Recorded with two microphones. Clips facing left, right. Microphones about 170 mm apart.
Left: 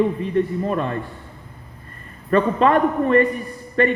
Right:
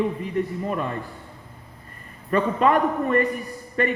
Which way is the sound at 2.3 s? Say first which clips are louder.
Left 3 dB; 65° left (ahead or behind).